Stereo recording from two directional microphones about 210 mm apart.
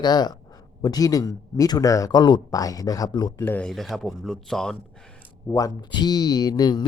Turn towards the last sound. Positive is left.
turn(degrees=20)  # may be behind; listen again after turning